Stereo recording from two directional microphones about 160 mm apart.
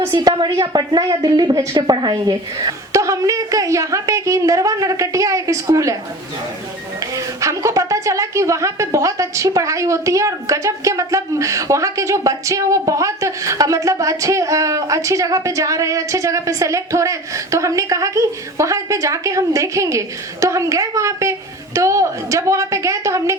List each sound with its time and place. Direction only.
0.0 s speech: 25° right (ahead or behind)
7.4 s speech: 20° right (ahead or behind)